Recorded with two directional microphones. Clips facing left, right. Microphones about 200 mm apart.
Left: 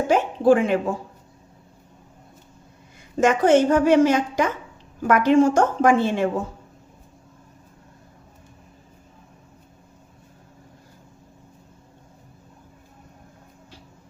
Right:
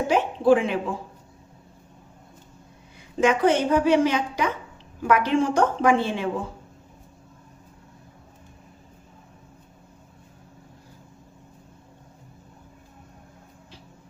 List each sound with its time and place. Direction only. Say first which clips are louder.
0.1 s a woman's voice: left 2 dB; 45° left (ahead or behind)
3.2 s a woman's voice: left 3 dB; 45° left (ahead or behind)